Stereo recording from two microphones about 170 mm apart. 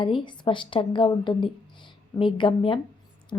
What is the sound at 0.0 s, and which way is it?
A woman's voice, 30° left (ahead or behind).